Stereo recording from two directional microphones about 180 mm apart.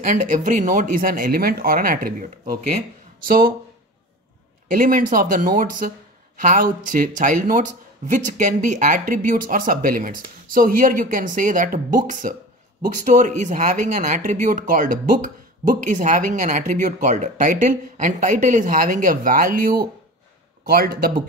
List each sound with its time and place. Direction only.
0.0 s a man's voice: 45° right (ahead or behind)
4.6 s a man's voice: 50° right (ahead or behind)